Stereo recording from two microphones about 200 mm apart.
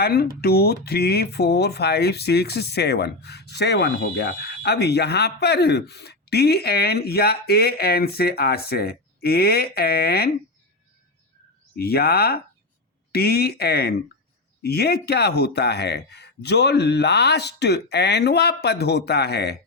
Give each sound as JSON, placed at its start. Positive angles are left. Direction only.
{"t": 0.0, "sound": "speech", "side_deg": 50}
{"t": 11.8, "sound": "speech", "side_deg": 50}